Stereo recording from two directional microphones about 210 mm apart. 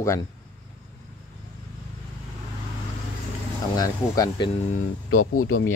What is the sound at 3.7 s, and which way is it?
Speech, 15° left (ahead or behind).